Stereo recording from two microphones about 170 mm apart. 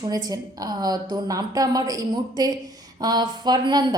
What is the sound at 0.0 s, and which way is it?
A woman's voice, 25° right (ahead or behind).